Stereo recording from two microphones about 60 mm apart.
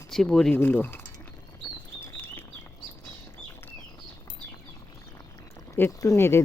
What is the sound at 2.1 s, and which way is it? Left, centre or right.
Chirp, left.